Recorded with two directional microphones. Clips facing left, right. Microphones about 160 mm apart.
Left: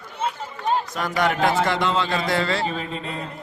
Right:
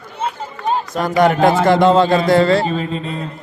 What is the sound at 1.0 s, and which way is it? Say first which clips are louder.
A man's voice: right 12 dB; 40° right (ahead or behind).